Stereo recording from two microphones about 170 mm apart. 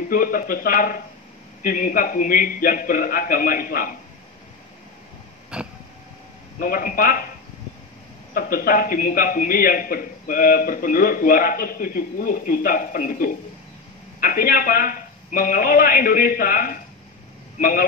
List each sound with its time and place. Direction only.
0.1 s a man's voice: 55° left (ahead or behind)
5.5 s vehicle: 5° right (ahead or behind)
6.6 s a man's voice: 55° left (ahead or behind)
8.4 s a man's voice: 55° left (ahead or behind)